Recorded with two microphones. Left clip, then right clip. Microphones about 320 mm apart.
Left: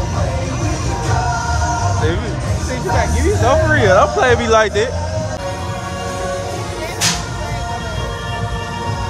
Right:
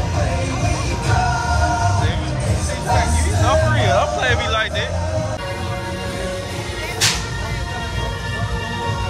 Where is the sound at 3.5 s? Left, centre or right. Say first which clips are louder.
Left 4 dB; left.